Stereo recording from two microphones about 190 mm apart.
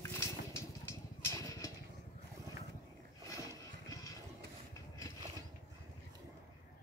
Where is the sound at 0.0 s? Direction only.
15° left (ahead or behind).